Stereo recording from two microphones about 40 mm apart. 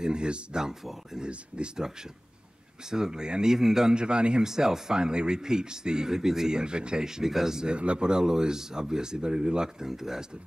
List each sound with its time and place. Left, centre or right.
0.0 s speech: right
2.9 s speech: centre
3.9 s speech: right
4.5 s speech: centre
6.6 s speech: right
7.7 s speech: right; by 10.2 s centre